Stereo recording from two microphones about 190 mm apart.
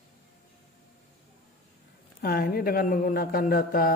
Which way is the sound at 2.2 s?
50° left (ahead or behind).